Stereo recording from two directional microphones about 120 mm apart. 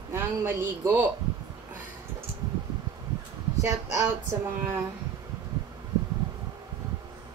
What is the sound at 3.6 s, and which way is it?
Speech, 25° right (ahead or behind).